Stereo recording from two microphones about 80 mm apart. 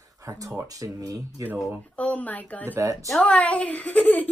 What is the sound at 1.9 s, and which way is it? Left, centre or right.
A woman's voice, centre.